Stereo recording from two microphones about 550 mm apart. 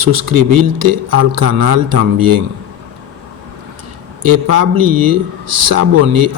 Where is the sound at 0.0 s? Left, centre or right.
Right.